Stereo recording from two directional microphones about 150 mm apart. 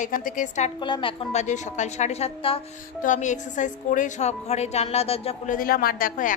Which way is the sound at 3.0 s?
55° left (ahead or behind).